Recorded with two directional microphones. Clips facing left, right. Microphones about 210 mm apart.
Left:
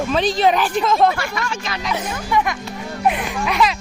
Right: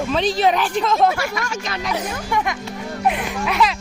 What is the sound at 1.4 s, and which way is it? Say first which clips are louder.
Speech: even; 45° right (ahead or behind).